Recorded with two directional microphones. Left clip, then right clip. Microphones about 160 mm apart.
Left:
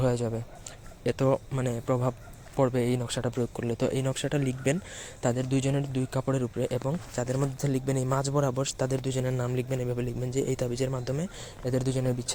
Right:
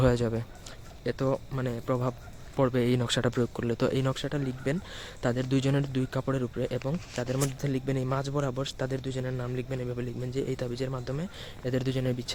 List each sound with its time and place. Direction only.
0.0 s speech: 25° right (ahead or behind)
1.0 s a man's voice: 5° left (ahead or behind)
2.6 s speech: 15° right (ahead or behind)
3.0 s speech: 30° right (ahead or behind)
4.1 s speech: centre (ahead or behind)
4.9 s speech: 10° right (ahead or behind)
7.6 s a man's voice: centre (ahead or behind)